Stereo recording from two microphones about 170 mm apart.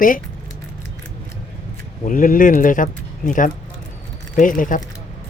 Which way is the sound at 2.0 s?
55° left (ahead or behind).